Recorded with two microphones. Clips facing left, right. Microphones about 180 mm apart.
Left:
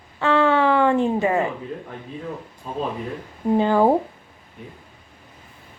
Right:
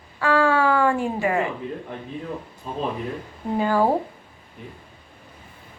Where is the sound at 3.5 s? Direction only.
20° left (ahead or behind).